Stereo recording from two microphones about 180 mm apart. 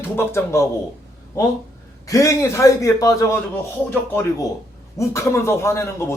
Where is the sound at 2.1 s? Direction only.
15° left (ahead or behind).